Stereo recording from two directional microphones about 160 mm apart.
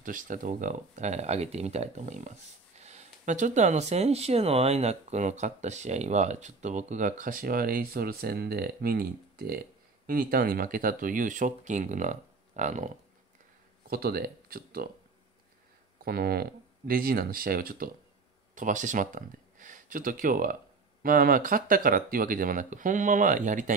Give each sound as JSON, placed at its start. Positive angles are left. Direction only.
{"t": 0.0, "sound": "speech", "side_deg": -55}
{"t": 13.8, "sound": "speech", "side_deg": -70}
{"t": 16.0, "sound": "speech", "side_deg": -75}
{"t": 18.5, "sound": "speech", "side_deg": -55}